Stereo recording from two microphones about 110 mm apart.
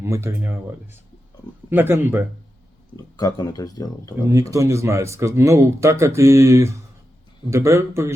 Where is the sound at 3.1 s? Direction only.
35° left (ahead or behind).